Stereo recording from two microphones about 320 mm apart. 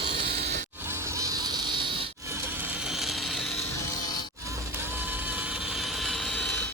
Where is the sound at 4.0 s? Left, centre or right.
Centre.